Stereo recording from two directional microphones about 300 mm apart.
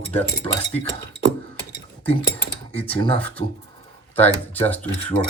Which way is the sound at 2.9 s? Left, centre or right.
Centre.